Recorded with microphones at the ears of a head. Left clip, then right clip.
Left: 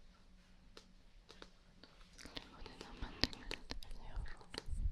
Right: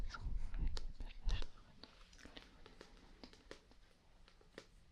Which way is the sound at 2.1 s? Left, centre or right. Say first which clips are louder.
Left 11 dB; left.